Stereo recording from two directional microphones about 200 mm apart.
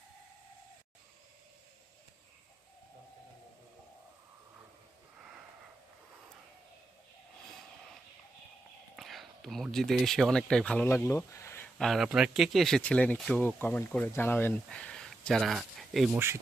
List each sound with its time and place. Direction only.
9.0 s speech: centre (ahead or behind)
11.8 s speech: centre (ahead or behind)
16.1 s speech: 15° right (ahead or behind)